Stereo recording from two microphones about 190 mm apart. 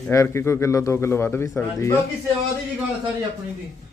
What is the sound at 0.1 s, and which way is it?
A man's voice, 15° left (ahead or behind).